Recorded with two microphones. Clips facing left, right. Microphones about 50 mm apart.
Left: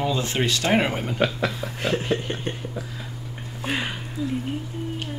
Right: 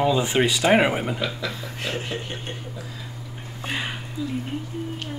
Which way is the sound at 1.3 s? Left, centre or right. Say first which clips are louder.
Left 4 dB; left.